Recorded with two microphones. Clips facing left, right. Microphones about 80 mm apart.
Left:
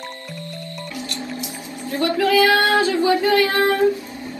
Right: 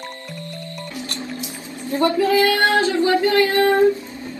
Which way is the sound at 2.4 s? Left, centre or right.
Left.